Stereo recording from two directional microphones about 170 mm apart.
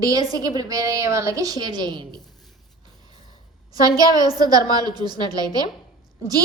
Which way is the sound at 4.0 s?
20° right (ahead or behind).